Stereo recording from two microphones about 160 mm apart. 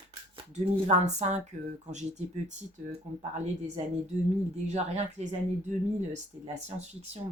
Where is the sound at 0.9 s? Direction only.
45° right (ahead or behind).